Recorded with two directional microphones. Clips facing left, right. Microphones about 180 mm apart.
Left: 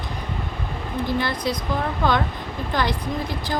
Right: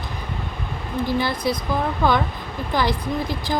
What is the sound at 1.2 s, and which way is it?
Speech, 10° right (ahead or behind).